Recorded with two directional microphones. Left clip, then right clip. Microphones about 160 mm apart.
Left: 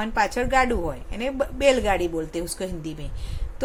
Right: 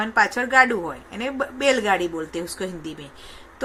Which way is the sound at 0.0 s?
20° left (ahead or behind).